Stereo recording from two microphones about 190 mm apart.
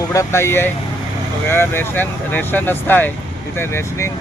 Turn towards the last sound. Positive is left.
turn(degrees=15)  # may be behind; listen again after turning